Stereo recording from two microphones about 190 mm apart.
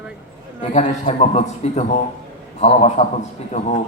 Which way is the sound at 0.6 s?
35° left (ahead or behind).